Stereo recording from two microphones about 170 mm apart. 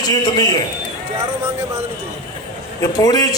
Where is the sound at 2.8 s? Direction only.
20° left (ahead or behind).